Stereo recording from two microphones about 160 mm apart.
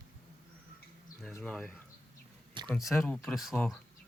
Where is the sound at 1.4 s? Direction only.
5° left (ahead or behind).